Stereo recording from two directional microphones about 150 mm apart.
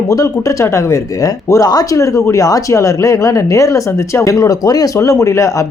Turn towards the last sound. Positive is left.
turn(degrees=20)  # may be behind; listen again after turning